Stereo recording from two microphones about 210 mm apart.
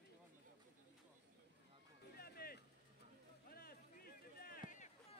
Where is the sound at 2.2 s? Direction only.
45° left (ahead or behind).